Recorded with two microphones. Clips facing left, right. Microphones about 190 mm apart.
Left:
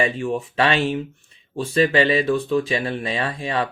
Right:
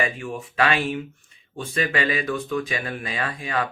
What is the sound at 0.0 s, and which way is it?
Speech, 30° left (ahead or behind).